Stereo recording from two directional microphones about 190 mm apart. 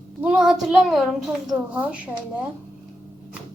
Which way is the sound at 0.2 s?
5° right (ahead or behind).